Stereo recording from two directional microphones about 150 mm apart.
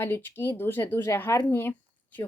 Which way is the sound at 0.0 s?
15° left (ahead or behind).